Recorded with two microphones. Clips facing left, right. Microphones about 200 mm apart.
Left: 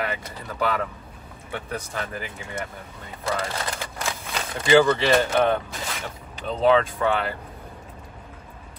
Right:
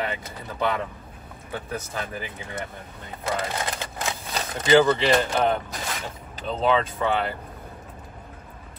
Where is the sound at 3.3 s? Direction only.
20° right (ahead or behind).